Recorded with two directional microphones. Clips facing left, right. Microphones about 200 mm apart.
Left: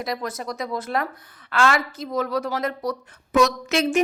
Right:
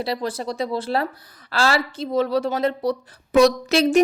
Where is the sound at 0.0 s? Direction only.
30° right (ahead or behind).